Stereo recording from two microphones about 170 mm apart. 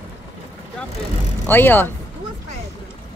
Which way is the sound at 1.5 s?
10° left (ahead or behind).